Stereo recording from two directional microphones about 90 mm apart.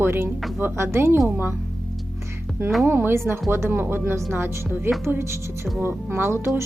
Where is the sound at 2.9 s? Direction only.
25° right (ahead or behind).